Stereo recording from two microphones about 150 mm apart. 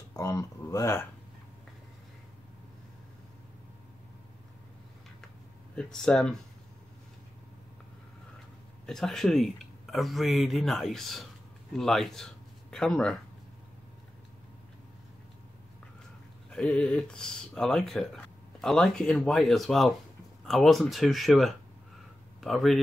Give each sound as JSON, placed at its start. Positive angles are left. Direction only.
{"t": 0.1, "sound": "speech", "side_deg": 25}
{"t": 5.8, "sound": "speech", "side_deg": 5}
{"t": 8.8, "sound": "speech", "side_deg": 5}
{"t": 16.4, "sound": "speech", "side_deg": 5}